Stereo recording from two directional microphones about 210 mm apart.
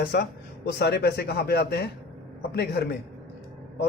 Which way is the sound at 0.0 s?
50° left (ahead or behind).